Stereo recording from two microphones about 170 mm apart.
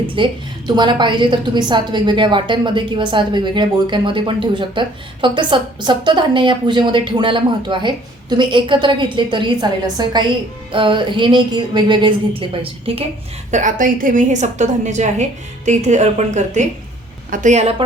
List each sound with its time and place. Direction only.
0.2 s a woman's voice: 30° right (ahead or behind)
13.5 s a woman's voice: 50° right (ahead or behind)